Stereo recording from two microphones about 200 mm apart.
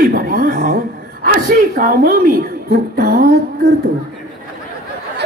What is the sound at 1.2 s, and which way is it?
Speech, 45° right (ahead or behind).